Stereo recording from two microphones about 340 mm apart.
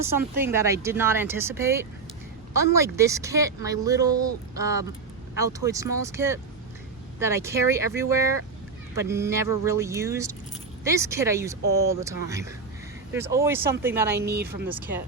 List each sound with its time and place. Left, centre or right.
0.0 s speech: centre
14.3 s speech: right